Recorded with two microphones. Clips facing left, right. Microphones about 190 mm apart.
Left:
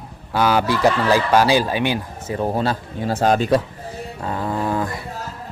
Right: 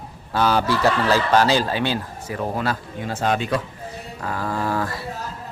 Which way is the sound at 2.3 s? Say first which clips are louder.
Left 4 dB; 25° left (ahead or behind).